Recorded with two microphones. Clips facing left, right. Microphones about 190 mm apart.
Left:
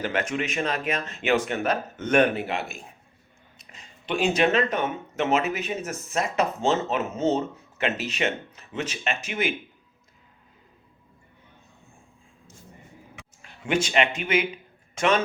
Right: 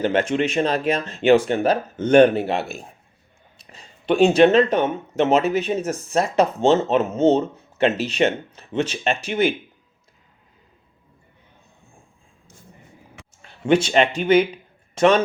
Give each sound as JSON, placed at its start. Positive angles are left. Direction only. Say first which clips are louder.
{"t": 0.0, "sound": "speech", "louder": "right 7 dB", "side_deg": -30}
{"t": 13.4, "sound": "a man's voice", "louder": "right 8 dB", "side_deg": -30}